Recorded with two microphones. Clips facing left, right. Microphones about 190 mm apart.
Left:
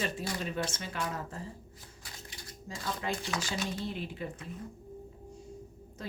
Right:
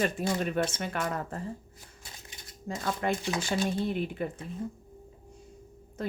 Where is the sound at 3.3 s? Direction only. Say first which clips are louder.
Right 6 dB; 25° right (ahead or behind).